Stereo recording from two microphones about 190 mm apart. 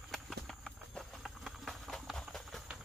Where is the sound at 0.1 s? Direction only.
Centre (ahead or behind).